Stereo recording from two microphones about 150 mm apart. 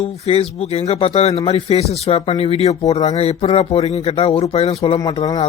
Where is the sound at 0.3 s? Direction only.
40° left (ahead or behind).